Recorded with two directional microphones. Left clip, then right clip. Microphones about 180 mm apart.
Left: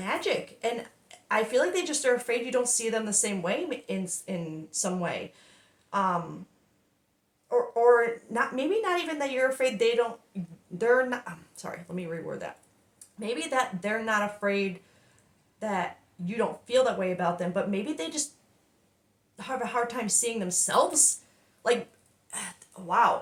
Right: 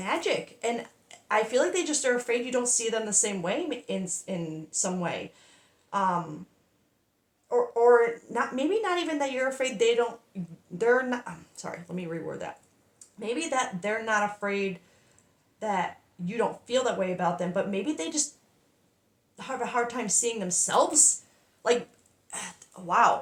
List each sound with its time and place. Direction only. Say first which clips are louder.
0.0 s a woman's voice: right 1 dB; 25° right (ahead or behind)
7.4 s a woman's voice: even; 15° right (ahead or behind)
19.4 s a woman's voice: even; 20° right (ahead or behind)
22.3 s speech: even; 25° right (ahead or behind)